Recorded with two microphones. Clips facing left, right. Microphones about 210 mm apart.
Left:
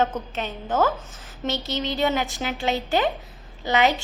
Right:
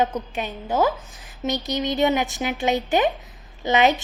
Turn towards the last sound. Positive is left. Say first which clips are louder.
# right 2 dB
turn(degrees=-20)  # may be behind; listen again after turning